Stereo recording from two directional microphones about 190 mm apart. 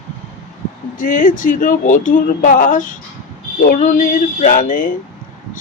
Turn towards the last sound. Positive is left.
turn(degrees=45)  # may be behind; listen again after turning